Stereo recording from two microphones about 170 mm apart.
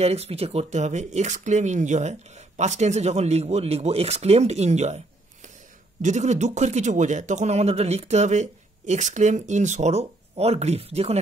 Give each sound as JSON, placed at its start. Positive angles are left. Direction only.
{"t": 0.0, "sound": "speech", "side_deg": -40}